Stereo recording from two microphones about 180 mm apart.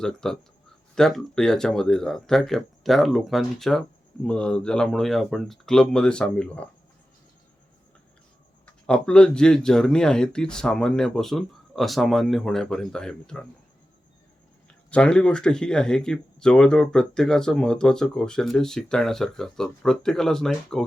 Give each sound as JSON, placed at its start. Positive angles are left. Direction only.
{"t": 0.0, "sound": "speech", "side_deg": 5}
{"t": 8.6, "sound": "speech", "side_deg": 5}
{"t": 14.7, "sound": "speech", "side_deg": 5}